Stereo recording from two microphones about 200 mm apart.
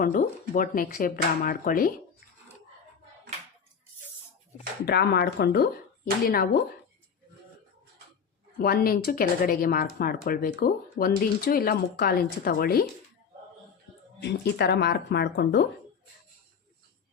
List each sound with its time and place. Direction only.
0.0 s speech: 40° left (ahead or behind)
4.9 s speech: 55° left (ahead or behind)
8.5 s speech: 50° left (ahead or behind)
14.2 s speech: 55° left (ahead or behind)